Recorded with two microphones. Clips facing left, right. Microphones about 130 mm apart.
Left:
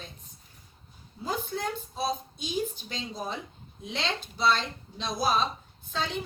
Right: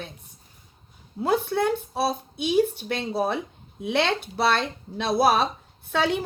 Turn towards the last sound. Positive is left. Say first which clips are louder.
# right 9 dB
turn(degrees=-65)  # may be behind; listen again after turning